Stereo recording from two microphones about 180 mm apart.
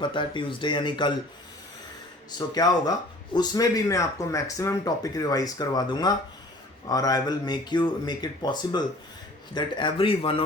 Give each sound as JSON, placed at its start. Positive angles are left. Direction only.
{"t": 0.0, "sound": "speech", "side_deg": 25}
{"t": 2.6, "sound": "speech", "side_deg": 20}